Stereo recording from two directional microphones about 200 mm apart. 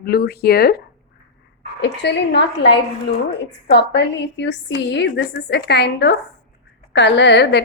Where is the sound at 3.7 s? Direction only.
60° left (ahead or behind).